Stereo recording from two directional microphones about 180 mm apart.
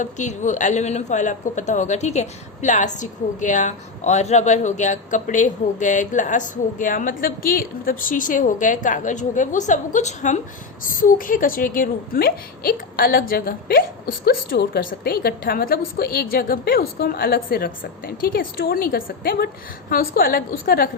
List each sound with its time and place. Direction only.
0.0 s a woman's voice: 40° left (ahead or behind)